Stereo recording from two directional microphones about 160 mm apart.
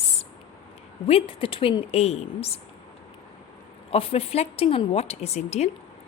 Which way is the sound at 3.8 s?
35° left (ahead or behind).